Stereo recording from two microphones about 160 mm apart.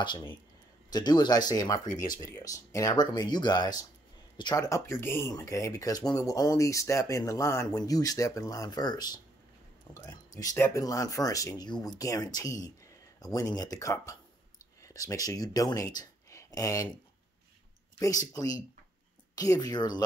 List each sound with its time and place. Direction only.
0.0 s speech: 30° left (ahead or behind)
17.9 s speech: 20° left (ahead or behind)